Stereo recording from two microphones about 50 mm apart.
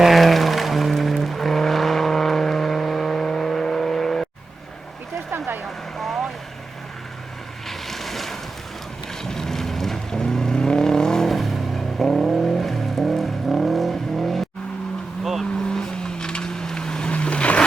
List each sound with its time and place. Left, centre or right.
0.0 s vehicle: centre
5.6 s vehicle: centre
7.7 s boat: centre
9.2 s vehicle: centre
15.7 s vehicle: centre